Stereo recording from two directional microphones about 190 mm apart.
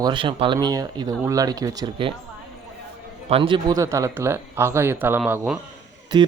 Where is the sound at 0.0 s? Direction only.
25° right (ahead or behind).